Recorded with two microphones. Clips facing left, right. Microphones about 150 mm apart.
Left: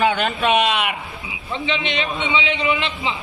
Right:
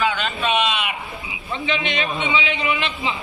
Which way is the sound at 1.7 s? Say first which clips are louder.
Even; 20° left (ahead or behind).